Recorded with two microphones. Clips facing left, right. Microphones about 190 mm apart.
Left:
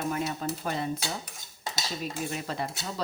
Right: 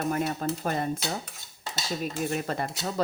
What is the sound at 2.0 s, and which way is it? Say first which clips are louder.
Speech: right 5 dB; 50° right (ahead or behind).